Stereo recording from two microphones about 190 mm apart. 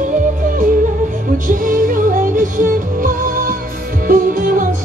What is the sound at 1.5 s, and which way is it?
Music, 45° right (ahead or behind).